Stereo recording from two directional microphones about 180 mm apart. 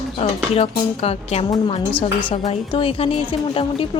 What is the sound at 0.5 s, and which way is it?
A woman's voice, 35° left (ahead or behind).